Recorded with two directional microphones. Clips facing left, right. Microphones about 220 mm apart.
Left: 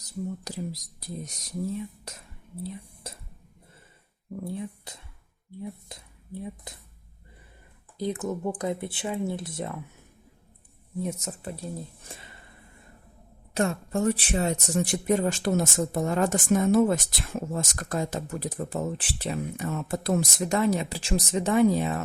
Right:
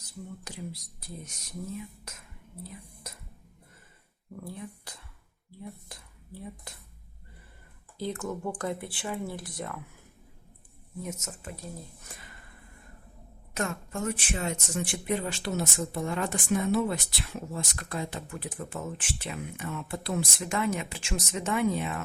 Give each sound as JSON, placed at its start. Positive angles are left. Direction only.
{"t": 0.0, "sound": "speech", "side_deg": 40}
{"t": 4.4, "sound": "speech", "side_deg": 20}
{"t": 7.9, "sound": "speech", "side_deg": 20}
{"t": 11.0, "sound": "speech", "side_deg": 35}
{"t": 12.0, "sound": "a sound", "side_deg": 25}
{"t": 13.5, "sound": "speech", "side_deg": 30}